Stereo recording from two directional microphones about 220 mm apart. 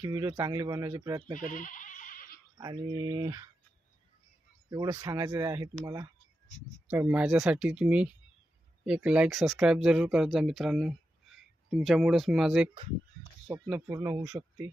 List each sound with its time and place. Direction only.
0.0 s speech: 15° right (ahead or behind)
1.4 s goat: 35° left (ahead or behind)
2.6 s speech: 20° right (ahead or behind)
4.7 s speech: 15° right (ahead or behind)
6.9 s speech: 5° right (ahead or behind)
13.5 s speech: 15° right (ahead or behind)